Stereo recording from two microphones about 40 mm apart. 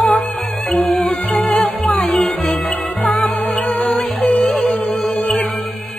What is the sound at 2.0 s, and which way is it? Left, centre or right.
Music, left.